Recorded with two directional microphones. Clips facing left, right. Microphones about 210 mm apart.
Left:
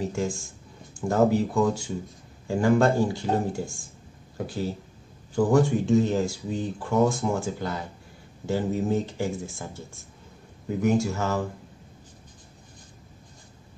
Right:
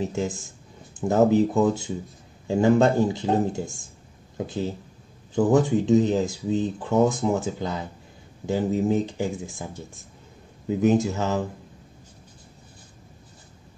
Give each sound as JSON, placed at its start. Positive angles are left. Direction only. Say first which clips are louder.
{"t": 0.0, "sound": "speech", "louder": "right 1 dB", "side_deg": -20}
{"t": 5.3, "sound": "speech", "louder": "right 2 dB", "side_deg": -20}